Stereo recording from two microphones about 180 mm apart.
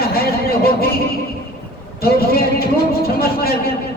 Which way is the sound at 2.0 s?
55° left (ahead or behind).